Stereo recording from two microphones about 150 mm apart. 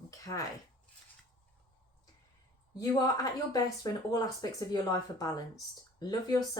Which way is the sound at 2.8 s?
25° left (ahead or behind).